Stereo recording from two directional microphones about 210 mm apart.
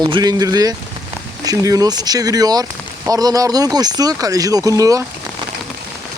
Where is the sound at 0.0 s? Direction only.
20° right (ahead or behind).